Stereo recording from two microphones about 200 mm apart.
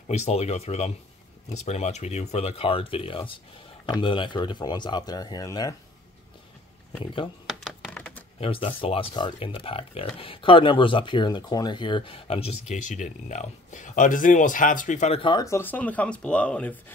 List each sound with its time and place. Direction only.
0.1 s speech: 30° left (ahead or behind)
7.6 s typing: 5° left (ahead or behind)
8.4 s speech: 30° left (ahead or behind); by 16.7 s 5° left (ahead or behind)